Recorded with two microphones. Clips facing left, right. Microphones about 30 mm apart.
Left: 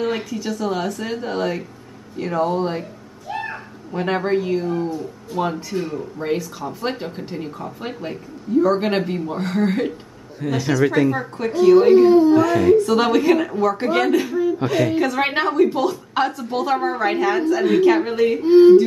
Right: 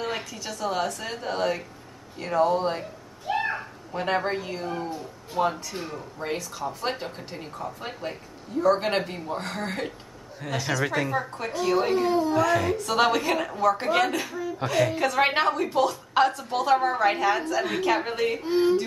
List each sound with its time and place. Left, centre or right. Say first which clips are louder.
0.0 s a woman's voice: left 8 dB; centre
3.3 s a sound: right 1 dB; centre
3.9 s speech: left 6 dB; centre
4.6 s speech: left 8 dB; centre
5.4 s a woman's voice: left 3 dB; centre
18.4 s speech: left 14 dB; centre